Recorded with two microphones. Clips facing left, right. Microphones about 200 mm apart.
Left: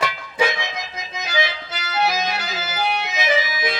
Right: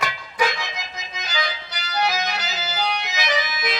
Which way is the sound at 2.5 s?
50° left (ahead or behind).